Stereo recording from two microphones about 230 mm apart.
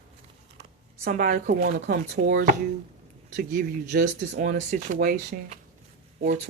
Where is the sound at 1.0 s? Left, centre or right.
Right.